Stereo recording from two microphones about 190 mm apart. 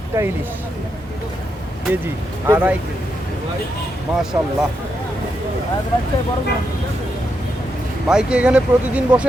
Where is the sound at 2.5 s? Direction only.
10° right (ahead or behind).